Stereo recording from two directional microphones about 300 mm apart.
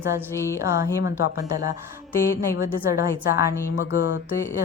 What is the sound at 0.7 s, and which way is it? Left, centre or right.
Speech, left.